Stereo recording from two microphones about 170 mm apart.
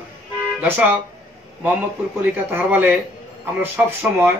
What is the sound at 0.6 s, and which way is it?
Speech, 10° right (ahead or behind).